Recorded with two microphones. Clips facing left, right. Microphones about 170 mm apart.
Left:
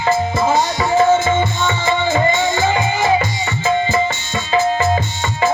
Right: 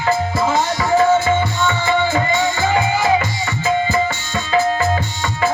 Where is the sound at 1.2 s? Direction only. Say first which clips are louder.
Even; 20° left (ahead or behind).